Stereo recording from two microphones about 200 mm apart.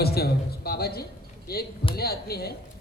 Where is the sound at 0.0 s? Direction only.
50° left (ahead or behind).